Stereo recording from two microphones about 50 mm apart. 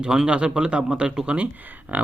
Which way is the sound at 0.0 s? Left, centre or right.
Centre.